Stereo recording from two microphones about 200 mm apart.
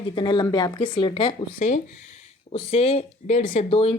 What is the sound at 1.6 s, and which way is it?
Speech, 35° left (ahead or behind).